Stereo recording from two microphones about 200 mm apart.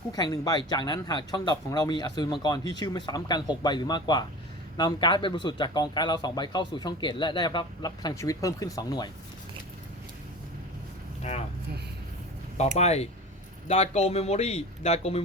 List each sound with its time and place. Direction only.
0.1 s speech: 20° left (ahead or behind)
11.2 s speech: 30° left (ahead or behind)
12.7 s speech: 30° left (ahead or behind)